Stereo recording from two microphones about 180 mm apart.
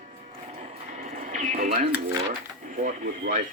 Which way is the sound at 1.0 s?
45° right (ahead or behind).